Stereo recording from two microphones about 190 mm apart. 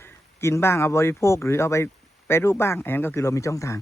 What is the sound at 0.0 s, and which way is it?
A man's voice, 15° left (ahead or behind).